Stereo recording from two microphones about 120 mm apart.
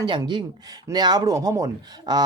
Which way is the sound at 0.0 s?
35° right (ahead or behind).